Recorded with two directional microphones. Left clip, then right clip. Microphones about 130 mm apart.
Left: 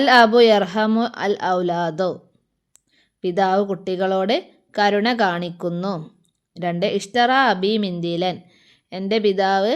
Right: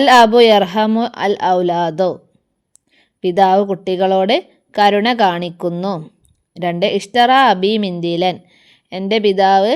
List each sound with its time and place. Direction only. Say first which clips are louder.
0.0 s a woman's voice: right 4 dB; 40° right (ahead or behind)